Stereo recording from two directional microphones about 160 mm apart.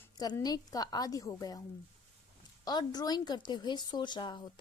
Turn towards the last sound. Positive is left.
turn(degrees=30)  # may be behind; listen again after turning